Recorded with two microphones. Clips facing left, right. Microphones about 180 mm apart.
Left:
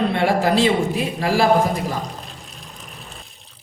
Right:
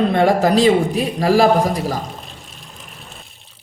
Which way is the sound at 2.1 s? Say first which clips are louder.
Even; centre (ahead or behind).